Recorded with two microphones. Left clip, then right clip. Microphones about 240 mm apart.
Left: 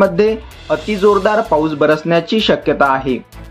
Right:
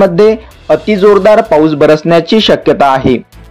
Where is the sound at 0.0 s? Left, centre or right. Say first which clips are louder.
Right 6 dB; right.